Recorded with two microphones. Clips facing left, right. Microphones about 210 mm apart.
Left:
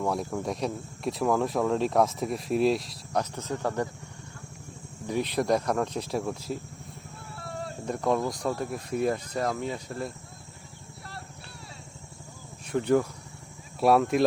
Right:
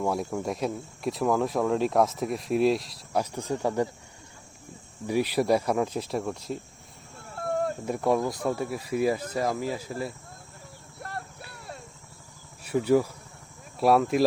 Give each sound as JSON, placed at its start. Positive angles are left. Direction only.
{"t": 0.0, "sound": "speech", "side_deg": -5}
{"t": 5.0, "sound": "speech", "side_deg": -10}
{"t": 7.3, "sound": "a sound", "side_deg": -50}
{"t": 7.9, "sound": "speech", "side_deg": -5}
{"t": 11.0, "sound": "a sound", "side_deg": -50}
{"t": 11.5, "sound": "vehicle", "side_deg": -55}
{"t": 12.6, "sound": "speech", "side_deg": -5}